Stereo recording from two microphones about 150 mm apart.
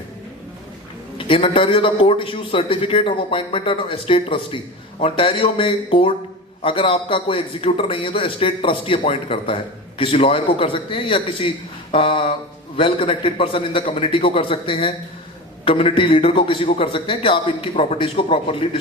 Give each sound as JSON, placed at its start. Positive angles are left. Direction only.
{"t": 1.2, "sound": "a man's voice", "side_deg": 35}